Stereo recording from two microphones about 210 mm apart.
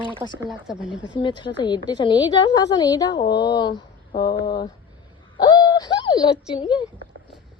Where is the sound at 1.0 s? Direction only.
25° left (ahead or behind).